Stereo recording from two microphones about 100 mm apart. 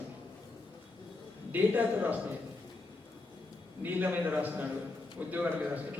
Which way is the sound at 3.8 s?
15° right (ahead or behind).